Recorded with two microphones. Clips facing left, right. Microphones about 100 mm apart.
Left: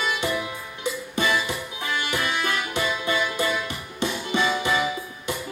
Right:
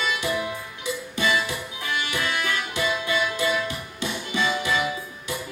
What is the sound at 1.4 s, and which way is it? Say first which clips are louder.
Music: left 1 dB; 20° left (ahead or behind).